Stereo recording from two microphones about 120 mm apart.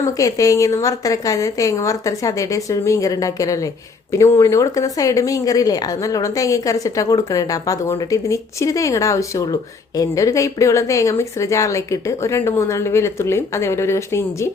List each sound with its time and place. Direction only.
0.0 s speech: 25° left (ahead or behind)